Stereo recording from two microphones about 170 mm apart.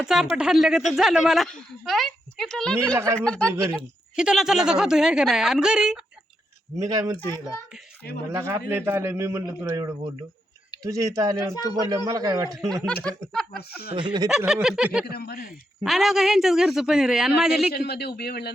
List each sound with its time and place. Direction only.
0.0 s a woman's voice: 5° right (ahead or behind)
3.5 s a man's voice: 15° right (ahead or behind)
4.1 s a woman's voice: 5° right (ahead or behind)
6.7 s a man's voice: 20° right (ahead or behind)
8.3 s a man's voice: 15° right (ahead or behind)
11.3 s speech: 25° left (ahead or behind)
11.9 s a man's voice: 20° right (ahead or behind)
12.5 s a woman's voice: centre (ahead or behind)
13.6 s a man's voice: 70° left (ahead or behind)
13.9 s a man's voice: 25° right (ahead or behind)
14.3 s a woman's voice: 5° right (ahead or behind)
15.0 s speech: 65° left (ahead or behind)
15.8 s a woman's voice: centre (ahead or behind)
17.7 s a man's voice: 70° left (ahead or behind)